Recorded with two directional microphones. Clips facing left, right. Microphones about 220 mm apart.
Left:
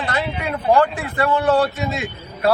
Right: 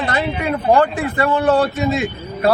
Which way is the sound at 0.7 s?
20° right (ahead or behind).